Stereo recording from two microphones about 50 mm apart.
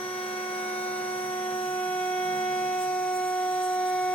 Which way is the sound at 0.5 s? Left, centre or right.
Left.